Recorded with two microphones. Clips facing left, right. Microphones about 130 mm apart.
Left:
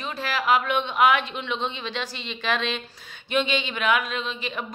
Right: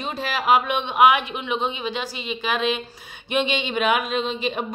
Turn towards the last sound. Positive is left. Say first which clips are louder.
# right 6 dB
turn(degrees=-20)  # may be behind; listen again after turning